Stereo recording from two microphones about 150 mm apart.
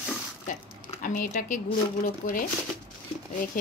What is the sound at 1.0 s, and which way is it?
A woman's voice, 65° left (ahead or behind).